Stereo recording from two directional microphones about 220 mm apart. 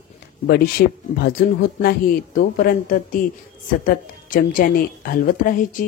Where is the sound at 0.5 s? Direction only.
45° left (ahead or behind).